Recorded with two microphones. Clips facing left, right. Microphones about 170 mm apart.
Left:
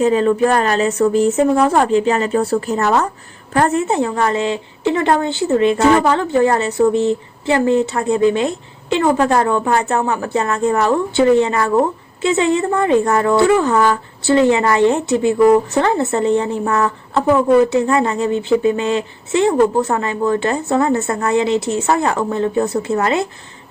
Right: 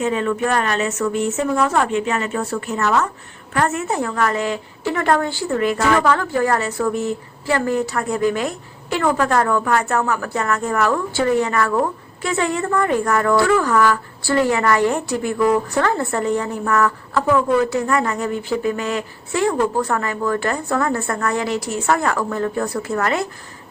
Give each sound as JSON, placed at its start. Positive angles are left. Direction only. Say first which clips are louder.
{"t": 0.0, "sound": "a woman's voice", "louder": "left 6 dB", "side_deg": 35}